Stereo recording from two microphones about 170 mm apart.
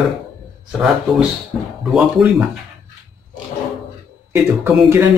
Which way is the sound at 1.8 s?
5° right (ahead or behind).